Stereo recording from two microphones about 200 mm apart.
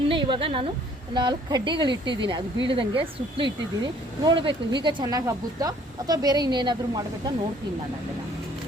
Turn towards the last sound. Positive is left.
turn(degrees=-20)  # may be behind; listen again after turning